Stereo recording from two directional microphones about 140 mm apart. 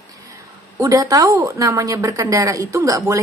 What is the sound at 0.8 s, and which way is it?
A woman's voice, 25° right (ahead or behind).